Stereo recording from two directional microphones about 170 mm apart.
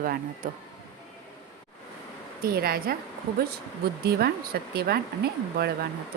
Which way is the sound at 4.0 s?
65° right (ahead or behind).